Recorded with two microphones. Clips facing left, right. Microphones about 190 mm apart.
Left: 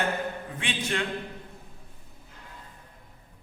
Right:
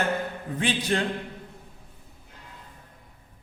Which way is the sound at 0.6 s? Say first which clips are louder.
Right 7 dB; 35° right (ahead or behind).